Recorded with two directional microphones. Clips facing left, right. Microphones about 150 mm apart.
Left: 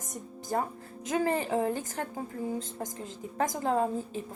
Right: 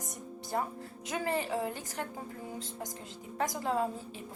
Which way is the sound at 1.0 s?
40° left (ahead or behind).